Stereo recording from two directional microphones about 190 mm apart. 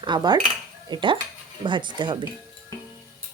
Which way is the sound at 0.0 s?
25° right (ahead or behind).